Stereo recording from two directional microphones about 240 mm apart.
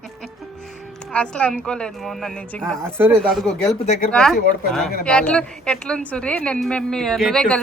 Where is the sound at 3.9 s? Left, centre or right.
Left.